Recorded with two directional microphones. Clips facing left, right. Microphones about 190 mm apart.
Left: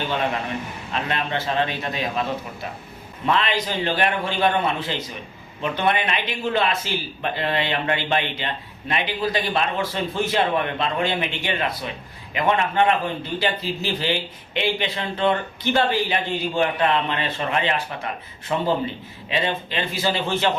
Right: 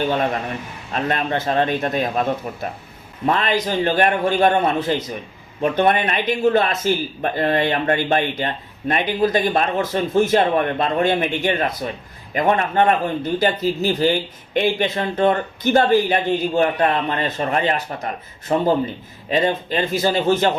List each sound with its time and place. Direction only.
0.9 s a man's voice: 45° right (ahead or behind)